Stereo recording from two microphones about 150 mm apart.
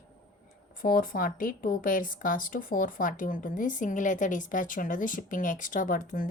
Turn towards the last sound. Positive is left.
turn(degrees=65)  # may be behind; listen again after turning